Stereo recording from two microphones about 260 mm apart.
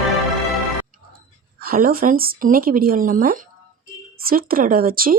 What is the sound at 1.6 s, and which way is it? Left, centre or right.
Speech, right.